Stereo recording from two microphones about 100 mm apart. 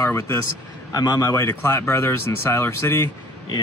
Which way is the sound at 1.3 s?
25° left (ahead or behind).